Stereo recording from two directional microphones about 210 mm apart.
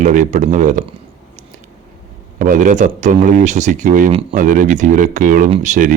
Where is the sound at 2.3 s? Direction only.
40° right (ahead or behind).